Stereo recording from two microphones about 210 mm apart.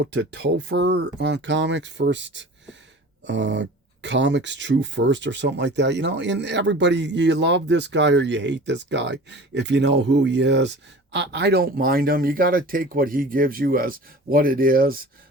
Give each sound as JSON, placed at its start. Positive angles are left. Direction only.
{"t": 0.0, "sound": "speech", "side_deg": -55}